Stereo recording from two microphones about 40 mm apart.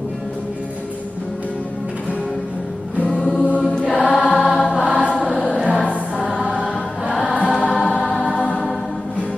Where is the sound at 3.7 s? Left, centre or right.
Left.